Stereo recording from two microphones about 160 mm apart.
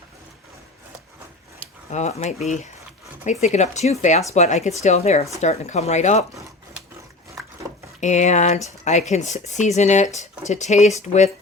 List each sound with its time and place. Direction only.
1.9 s speech: 45° left (ahead or behind)
8.0 s speech: 45° left (ahead or behind)